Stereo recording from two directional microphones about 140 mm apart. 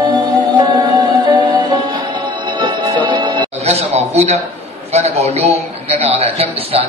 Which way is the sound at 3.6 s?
50° right (ahead or behind).